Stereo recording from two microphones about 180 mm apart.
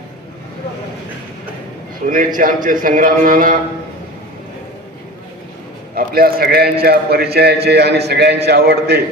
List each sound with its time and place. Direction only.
2.0 s a man's voice: 50° right (ahead or behind)
5.9 s a man's voice: 55° right (ahead or behind)